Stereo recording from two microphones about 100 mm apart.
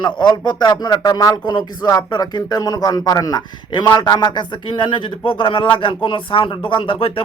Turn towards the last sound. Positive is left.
turn(degrees=65)  # may be behind; listen again after turning